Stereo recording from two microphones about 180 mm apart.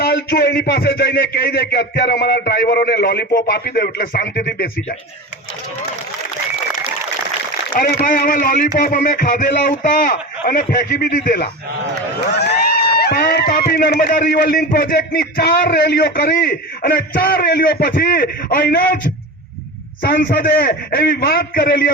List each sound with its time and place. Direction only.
0.0 s a man's voice: 60° left (ahead or behind)
7.8 s music: 55° left (ahead or behind)
12.3 s a sound: 70° left (ahead or behind)
13.0 s a man's voice: 60° left (ahead or behind)
18.7 s music: 50° left (ahead or behind)
20.0 s a man's voice: 50° left (ahead or behind)